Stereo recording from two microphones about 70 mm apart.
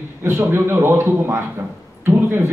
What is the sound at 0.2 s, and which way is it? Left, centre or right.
A man's voice, right.